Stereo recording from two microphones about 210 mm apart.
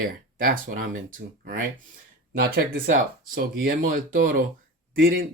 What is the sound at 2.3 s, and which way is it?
Speech, 45° right (ahead or behind).